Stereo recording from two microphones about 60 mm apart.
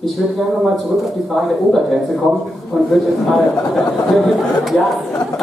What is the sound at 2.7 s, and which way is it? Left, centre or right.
Speech, centre.